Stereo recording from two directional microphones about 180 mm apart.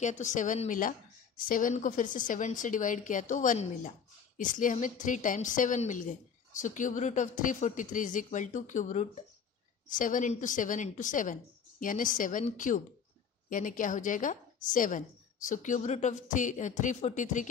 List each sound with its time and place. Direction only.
0.0 s a woman's voice: 40° left (ahead or behind)